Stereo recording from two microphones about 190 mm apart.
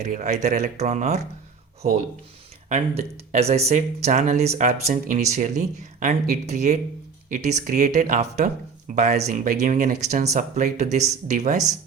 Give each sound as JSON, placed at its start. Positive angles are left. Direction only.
{"t": 0.0, "sound": "speech", "side_deg": -40}